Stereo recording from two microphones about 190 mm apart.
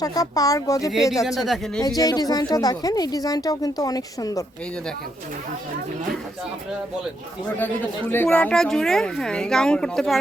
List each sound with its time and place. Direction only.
0.0 s a woman's voice: 20° left (ahead or behind)
0.9 s speech: centre (ahead or behind)
2.0 s a woman's voice: 20° left (ahead or behind)
7.6 s speech: 10° left (ahead or behind)